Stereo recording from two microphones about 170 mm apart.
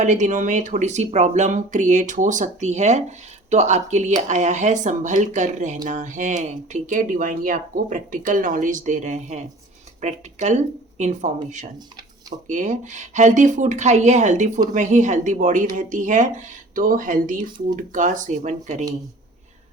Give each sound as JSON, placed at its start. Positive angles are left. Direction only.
{"t": 0.0, "sound": "speech", "side_deg": -45}